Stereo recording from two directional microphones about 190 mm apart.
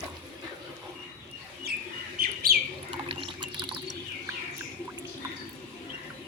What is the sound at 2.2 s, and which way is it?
Bird, 50° right (ahead or behind).